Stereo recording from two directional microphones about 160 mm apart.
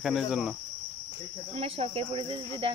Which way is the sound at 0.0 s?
Centre (ahead or behind).